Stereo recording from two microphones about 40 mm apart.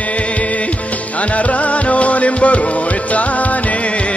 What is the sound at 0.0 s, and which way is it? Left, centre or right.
Music, left.